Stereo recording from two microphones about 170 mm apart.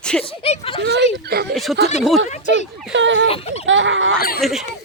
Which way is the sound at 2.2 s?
45° left (ahead or behind).